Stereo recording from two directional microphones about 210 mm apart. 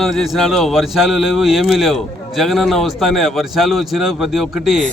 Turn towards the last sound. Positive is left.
turn(degrees=0)  # may be behind; listen again after turning